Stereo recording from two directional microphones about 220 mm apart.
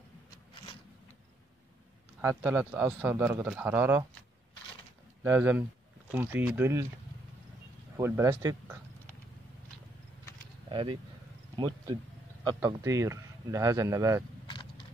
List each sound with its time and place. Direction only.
2.2 s speech: 10° right (ahead or behind)
5.2 s speech: 10° right (ahead or behind)
8.0 s speech: 10° right (ahead or behind)
10.7 s speech: 20° right (ahead or behind)
14.5 s a sound: 20° left (ahead or behind)